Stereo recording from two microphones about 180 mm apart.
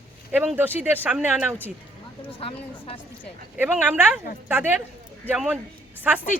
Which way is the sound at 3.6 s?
10° right (ahead or behind).